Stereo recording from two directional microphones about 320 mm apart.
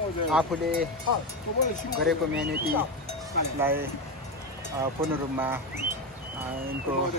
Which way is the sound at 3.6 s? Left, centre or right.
Centre.